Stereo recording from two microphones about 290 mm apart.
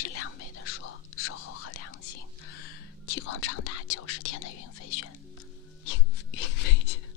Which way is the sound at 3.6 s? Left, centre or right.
Left.